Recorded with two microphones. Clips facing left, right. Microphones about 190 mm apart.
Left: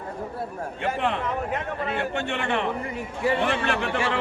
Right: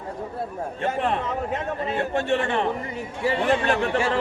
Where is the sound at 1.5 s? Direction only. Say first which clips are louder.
Right 2 dB; 35° right (ahead or behind).